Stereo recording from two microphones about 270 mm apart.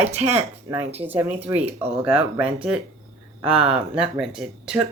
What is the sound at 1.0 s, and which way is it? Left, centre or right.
Speech, centre.